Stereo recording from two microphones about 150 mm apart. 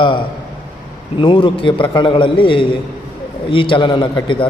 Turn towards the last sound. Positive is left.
turn(degrees=35)  # may be behind; listen again after turning